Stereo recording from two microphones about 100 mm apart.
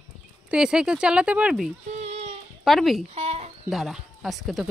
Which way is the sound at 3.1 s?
90° right.